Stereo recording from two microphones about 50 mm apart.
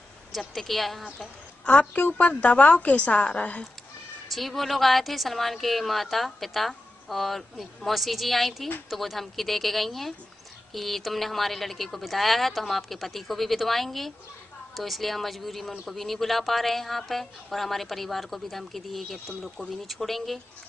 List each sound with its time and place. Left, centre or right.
0.3 s a woman's voice: centre
1.7 s a woman's voice: left
4.3 s a woman's voice: centre